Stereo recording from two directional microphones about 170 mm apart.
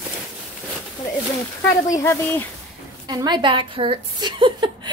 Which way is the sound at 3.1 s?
25° right (ahead or behind).